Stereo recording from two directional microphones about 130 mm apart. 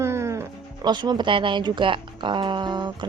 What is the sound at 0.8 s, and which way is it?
A woman's voice, 35° right (ahead or behind).